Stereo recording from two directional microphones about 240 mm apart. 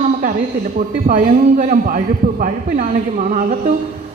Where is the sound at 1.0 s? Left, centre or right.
Right.